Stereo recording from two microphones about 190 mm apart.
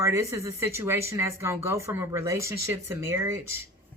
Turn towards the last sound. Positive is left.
turn(degrees=-15)  # may be behind; listen again after turning